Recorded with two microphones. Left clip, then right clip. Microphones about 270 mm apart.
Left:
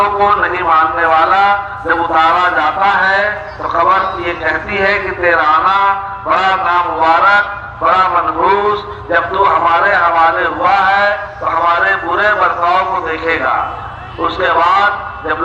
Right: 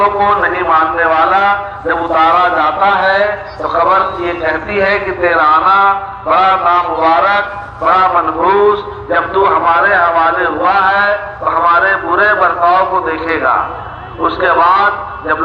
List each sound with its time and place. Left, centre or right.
0.0 s a man's voice: left